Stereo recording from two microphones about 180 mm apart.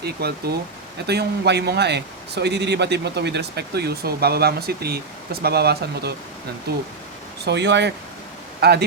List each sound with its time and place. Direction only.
0.0 s speech: 65° right (ahead or behind)
7.4 s speech: 70° right (ahead or behind)
8.6 s speech: 60° right (ahead or behind)